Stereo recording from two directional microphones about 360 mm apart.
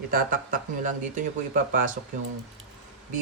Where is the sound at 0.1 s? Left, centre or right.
Right.